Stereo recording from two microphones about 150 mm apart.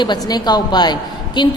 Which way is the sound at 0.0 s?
30° left (ahead or behind).